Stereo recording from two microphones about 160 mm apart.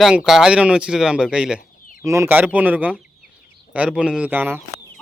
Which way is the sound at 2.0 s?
15° right (ahead or behind).